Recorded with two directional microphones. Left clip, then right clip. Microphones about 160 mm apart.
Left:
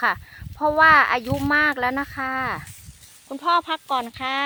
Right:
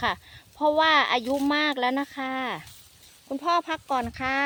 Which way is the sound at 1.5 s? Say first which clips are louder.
Left 7 dB; 5° right (ahead or behind).